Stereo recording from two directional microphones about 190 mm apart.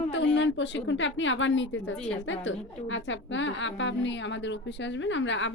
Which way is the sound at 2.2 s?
85° left.